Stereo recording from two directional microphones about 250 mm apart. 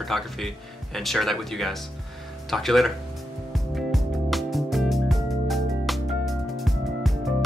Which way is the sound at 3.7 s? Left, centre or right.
Centre.